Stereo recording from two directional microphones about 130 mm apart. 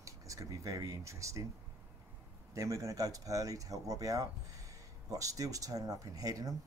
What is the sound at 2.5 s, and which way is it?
Speech, 25° right (ahead or behind).